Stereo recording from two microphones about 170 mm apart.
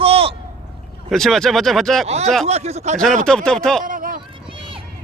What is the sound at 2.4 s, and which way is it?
Speech, 40° right (ahead or behind).